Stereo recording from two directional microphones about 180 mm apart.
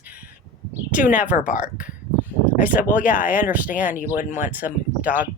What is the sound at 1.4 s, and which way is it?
Speech, 45° left (ahead or behind).